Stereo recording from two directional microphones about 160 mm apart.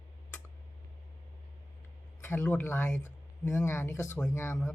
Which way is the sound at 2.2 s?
10° left (ahead or behind).